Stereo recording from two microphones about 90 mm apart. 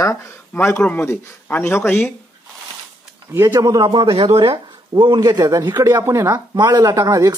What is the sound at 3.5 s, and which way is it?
Speech, 40° right (ahead or behind).